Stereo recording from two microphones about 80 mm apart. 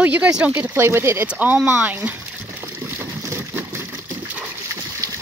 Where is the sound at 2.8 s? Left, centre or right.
Right.